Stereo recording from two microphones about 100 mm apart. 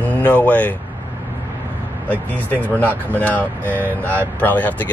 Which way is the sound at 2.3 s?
15° left (ahead or behind).